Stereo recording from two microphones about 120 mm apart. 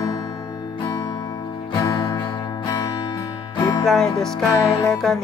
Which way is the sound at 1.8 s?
30° left (ahead or behind).